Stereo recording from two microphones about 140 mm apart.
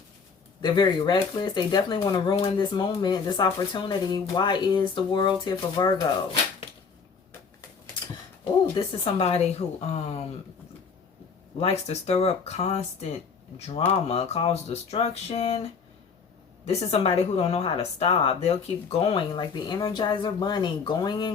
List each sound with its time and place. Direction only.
0.6 s speech: 30° left (ahead or behind)
8.7 s speech: 45° left (ahead or behind)
11.6 s speech: 50° left (ahead or behind)
19.4 s speech: 30° left (ahead or behind)